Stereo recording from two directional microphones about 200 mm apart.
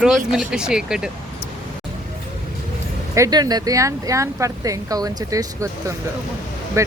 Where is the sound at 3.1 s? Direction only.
15° right (ahead or behind).